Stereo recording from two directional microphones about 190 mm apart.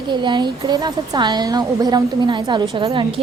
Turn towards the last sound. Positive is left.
turn(degrees=-25)  # may be behind; listen again after turning